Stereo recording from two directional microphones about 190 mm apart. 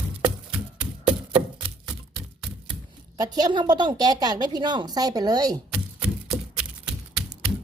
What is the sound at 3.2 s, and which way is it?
A woman's voice, 20° right (ahead or behind).